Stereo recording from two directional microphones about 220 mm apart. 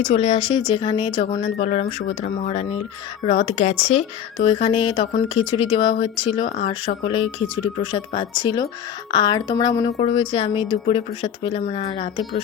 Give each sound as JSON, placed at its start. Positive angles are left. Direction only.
{"t": 0.0, "sound": "speech", "side_deg": 25}